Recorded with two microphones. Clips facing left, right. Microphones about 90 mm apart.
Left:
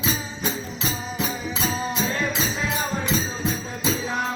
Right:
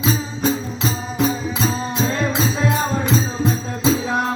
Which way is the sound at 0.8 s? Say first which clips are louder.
Right 7 dB; 25° right (ahead or behind).